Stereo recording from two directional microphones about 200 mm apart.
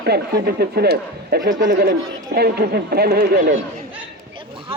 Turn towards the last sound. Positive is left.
turn(degrees=-50)  # may be behind; listen again after turning